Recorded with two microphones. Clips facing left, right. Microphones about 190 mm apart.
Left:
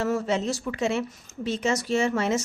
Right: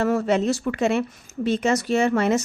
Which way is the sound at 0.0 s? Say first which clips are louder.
Right 5 dB; 60° right (ahead or behind).